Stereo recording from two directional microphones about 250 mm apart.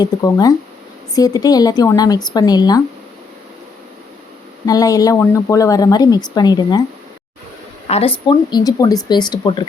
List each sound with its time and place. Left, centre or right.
0.0 s a woman's voice: centre
4.6 s a woman's voice: centre
7.9 s a woman's voice: left